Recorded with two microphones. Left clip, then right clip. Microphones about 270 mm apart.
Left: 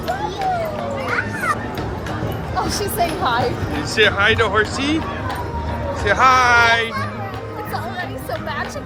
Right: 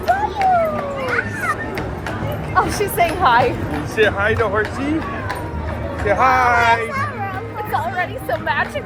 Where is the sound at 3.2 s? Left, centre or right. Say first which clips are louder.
Right 8 dB; right.